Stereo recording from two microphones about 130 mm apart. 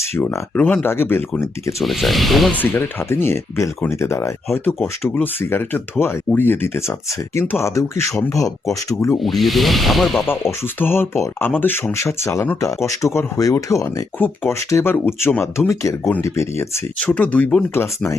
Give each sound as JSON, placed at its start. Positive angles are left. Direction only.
{"t": 0.2, "sound": "speech", "side_deg": 15}
{"t": 1.8, "sound": "speech", "side_deg": 0}
{"t": 2.6, "sound": "speech", "side_deg": 15}
{"t": 9.1, "sound": "speech", "side_deg": 0}
{"t": 10.2, "sound": "speech", "side_deg": 20}
{"t": 17.0, "sound": "speech", "side_deg": 10}